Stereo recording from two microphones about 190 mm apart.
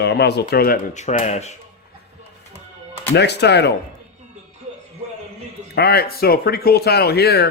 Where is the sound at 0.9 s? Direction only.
40° left (ahead or behind).